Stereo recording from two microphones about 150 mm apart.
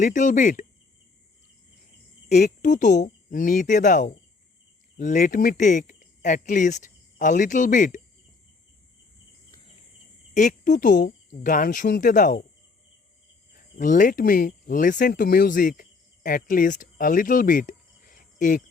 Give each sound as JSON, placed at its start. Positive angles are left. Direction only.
{"t": 0.0, "sound": "speech", "side_deg": 55}
{"t": 2.3, "sound": "speech", "side_deg": 55}
{"t": 10.3, "sound": "speech", "side_deg": 55}
{"t": 13.7, "sound": "speech", "side_deg": 60}